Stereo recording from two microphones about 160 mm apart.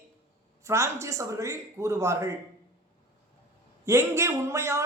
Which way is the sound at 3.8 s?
15° right (ahead or behind).